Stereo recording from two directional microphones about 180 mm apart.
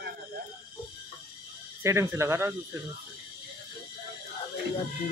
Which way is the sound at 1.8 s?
15° right (ahead or behind).